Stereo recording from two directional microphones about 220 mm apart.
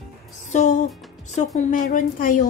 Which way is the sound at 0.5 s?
35° left (ahead or behind).